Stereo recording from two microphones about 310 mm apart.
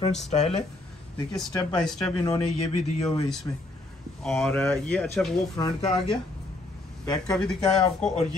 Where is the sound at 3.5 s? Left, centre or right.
Centre.